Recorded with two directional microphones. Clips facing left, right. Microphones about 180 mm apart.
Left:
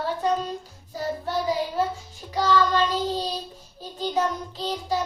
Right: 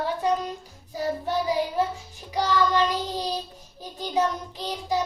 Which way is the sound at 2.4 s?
15° right (ahead or behind).